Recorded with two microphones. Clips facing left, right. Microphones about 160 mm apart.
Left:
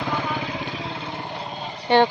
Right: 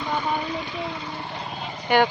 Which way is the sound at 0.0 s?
90° left.